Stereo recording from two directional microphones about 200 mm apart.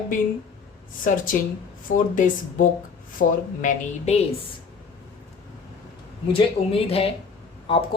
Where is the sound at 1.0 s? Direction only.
45° left (ahead or behind).